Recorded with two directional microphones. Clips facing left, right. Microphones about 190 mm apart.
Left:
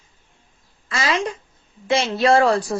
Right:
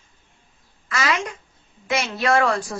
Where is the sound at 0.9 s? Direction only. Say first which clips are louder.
Left 2 dB; 30° left (ahead or behind).